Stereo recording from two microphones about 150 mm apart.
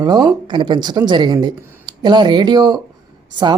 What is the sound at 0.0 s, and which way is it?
Speech, 30° right (ahead or behind).